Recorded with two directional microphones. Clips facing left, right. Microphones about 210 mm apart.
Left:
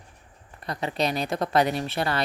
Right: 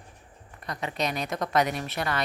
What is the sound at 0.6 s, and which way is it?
Speech, 30° left (ahead or behind).